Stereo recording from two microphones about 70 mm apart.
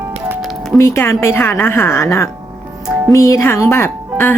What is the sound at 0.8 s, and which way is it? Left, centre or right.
A woman's voice, left.